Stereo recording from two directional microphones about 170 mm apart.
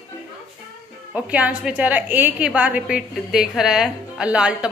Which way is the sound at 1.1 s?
10° right (ahead or behind).